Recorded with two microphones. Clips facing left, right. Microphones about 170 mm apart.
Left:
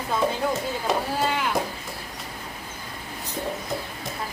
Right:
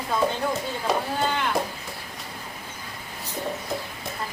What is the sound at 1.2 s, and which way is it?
Speech, 5° left (ahead or behind).